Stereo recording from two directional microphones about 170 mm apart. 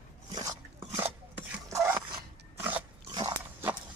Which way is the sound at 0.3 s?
25° right (ahead or behind).